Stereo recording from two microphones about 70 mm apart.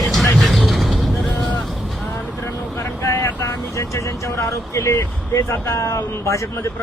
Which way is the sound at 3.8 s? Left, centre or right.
Left.